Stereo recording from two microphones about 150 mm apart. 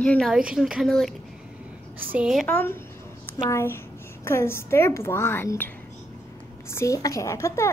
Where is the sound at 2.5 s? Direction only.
10° left (ahead or behind).